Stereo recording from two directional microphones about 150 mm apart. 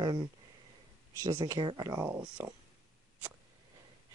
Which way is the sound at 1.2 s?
20° right (ahead or behind).